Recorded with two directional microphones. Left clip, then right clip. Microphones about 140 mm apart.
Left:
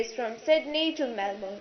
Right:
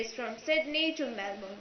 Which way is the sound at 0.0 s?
10° left (ahead or behind).